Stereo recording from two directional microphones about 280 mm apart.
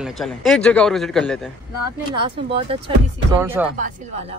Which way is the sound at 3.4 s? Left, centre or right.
Centre.